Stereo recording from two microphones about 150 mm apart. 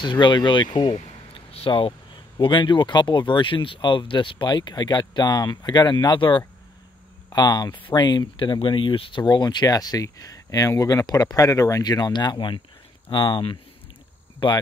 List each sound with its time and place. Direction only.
0.0 s speech: 30° left (ahead or behind)